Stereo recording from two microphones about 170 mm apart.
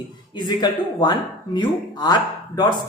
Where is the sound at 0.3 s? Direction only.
25° left (ahead or behind).